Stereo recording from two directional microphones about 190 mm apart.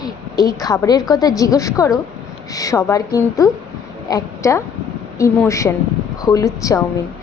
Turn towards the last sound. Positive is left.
turn(degrees=15)  # may be behind; listen again after turning